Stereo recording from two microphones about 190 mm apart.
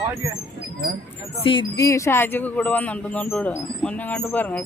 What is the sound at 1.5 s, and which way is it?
Speech, 20° left (ahead or behind).